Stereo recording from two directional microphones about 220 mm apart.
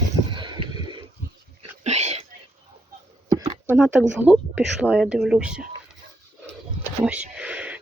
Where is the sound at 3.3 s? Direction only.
20° right (ahead or behind).